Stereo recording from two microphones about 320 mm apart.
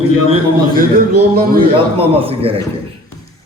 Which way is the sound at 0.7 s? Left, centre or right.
Right.